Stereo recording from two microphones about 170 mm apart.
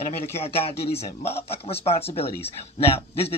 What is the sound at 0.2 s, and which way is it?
Speech, 35° left (ahead or behind).